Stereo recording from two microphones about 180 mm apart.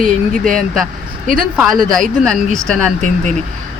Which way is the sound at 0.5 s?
Centre (ahead or behind).